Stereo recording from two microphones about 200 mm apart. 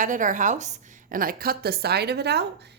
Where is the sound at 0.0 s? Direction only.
40° right (ahead or behind).